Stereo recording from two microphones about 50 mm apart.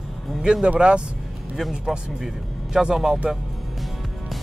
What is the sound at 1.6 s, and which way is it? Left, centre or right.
Speech, centre.